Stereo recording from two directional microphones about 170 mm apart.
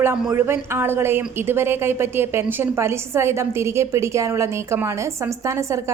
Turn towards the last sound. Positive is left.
turn(degrees=-15)  # may be behind; listen again after turning